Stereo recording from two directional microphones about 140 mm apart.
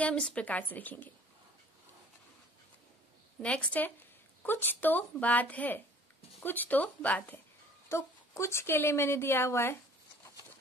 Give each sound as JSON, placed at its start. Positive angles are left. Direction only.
{"t": 0.0, "sound": "speech", "side_deg": 5}
{"t": 3.3, "sound": "speech", "side_deg": 10}